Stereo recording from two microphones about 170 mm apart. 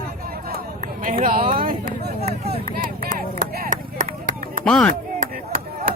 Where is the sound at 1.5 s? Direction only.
60° right (ahead or behind).